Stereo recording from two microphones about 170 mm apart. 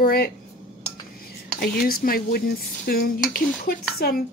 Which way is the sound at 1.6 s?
60° left (ahead or behind).